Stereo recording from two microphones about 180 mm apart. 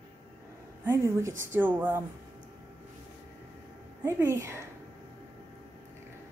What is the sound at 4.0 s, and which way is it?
Speech, 15° right (ahead or behind).